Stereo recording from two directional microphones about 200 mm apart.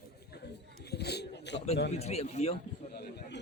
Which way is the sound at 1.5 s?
30° left (ahead or behind).